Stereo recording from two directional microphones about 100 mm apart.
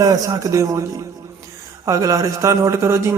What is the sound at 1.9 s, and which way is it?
A man's voice, 35° right (ahead or behind).